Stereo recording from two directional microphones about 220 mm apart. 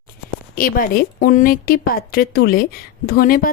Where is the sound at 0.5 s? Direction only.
40° left (ahead or behind).